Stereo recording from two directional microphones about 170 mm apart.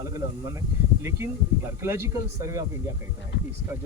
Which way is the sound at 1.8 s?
15° right (ahead or behind).